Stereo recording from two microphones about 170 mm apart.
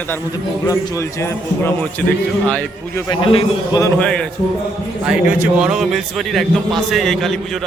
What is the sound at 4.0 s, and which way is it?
Speech, 5° left (ahead or behind).